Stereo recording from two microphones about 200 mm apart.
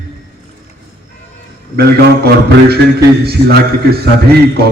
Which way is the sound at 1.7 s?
50° right (ahead or behind).